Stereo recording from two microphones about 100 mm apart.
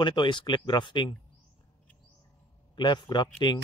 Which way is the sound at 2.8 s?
50° left (ahead or behind).